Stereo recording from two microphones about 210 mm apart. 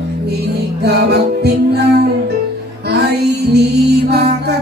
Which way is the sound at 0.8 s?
50° right (ahead or behind).